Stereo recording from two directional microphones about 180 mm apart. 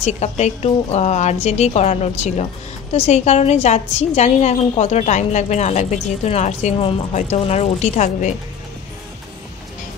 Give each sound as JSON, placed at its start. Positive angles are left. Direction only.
{"t": 0.0, "sound": "a woman's voice", "side_deg": 40}